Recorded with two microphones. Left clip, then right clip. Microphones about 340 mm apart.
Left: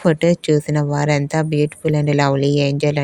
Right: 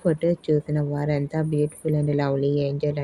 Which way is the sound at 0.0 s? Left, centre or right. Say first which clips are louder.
Left 7 dB; left.